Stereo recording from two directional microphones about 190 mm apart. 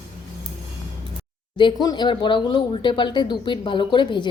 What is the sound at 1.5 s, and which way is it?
Speech, 20° left (ahead or behind).